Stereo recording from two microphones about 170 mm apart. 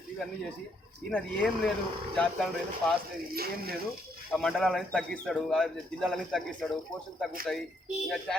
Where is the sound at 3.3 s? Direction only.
65° right (ahead or behind).